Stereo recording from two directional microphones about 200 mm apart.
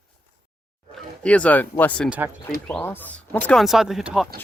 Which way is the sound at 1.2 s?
5° left (ahead or behind).